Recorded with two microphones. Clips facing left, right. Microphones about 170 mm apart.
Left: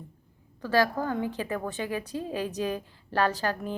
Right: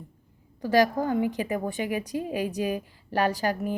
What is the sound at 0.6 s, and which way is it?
A woman's voice, 15° right (ahead or behind).